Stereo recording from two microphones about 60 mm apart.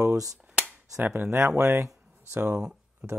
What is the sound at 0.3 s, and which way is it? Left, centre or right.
Cap gun, centre.